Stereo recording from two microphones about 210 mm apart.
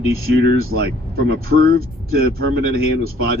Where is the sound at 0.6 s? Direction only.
45° right (ahead or behind).